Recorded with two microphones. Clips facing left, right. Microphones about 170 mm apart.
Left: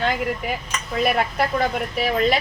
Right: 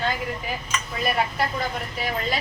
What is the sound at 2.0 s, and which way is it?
Speech, 75° left (ahead or behind).